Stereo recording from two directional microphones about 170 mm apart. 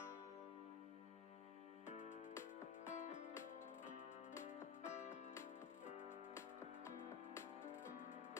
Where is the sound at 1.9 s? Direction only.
45° left (ahead or behind).